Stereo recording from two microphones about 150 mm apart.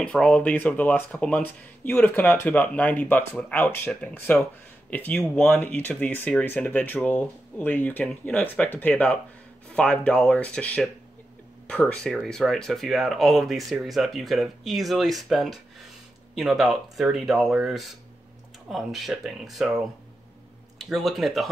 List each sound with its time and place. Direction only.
0.0 s speech: 5° left (ahead or behind)
20.8 s speech: centre (ahead or behind)